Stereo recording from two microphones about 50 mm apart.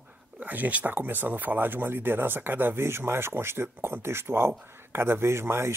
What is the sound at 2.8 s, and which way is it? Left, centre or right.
Speech, right.